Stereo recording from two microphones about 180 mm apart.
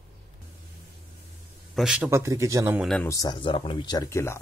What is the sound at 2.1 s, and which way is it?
Speech, 15° right (ahead or behind).